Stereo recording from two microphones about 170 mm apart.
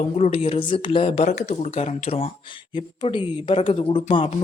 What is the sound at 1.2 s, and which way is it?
Speech, 45° left (ahead or behind).